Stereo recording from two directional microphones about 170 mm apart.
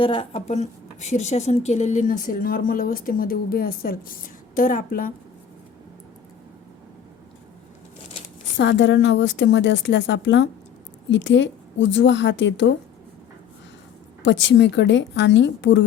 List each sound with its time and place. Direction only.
0.0 s a woman's voice: 30° left (ahead or behind); by 5.1 s 55° left (ahead or behind)
8.5 s speech: 90° left
14.2 s speech: 90° left